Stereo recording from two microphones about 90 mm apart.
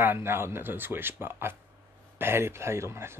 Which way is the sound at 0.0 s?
25° right (ahead or behind).